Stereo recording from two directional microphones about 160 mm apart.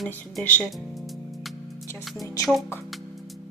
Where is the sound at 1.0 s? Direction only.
Centre (ahead or behind).